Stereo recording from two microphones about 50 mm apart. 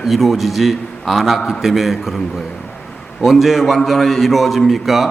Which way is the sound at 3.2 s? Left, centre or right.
Centre.